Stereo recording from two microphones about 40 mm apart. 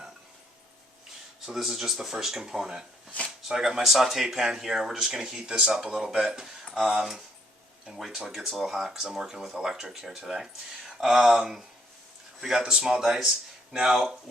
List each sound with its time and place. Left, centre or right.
1.5 s speech: centre
13.0 s speech: centre